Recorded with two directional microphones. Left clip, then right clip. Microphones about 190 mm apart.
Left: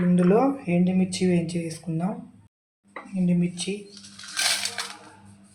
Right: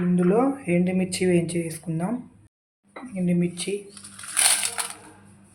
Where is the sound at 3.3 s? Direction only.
40° right (ahead or behind).